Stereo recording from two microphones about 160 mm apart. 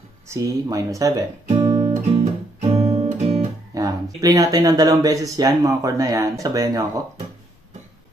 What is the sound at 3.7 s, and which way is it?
Speech, 20° right (ahead or behind).